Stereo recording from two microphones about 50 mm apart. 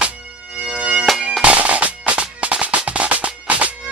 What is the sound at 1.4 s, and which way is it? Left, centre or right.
Music, right.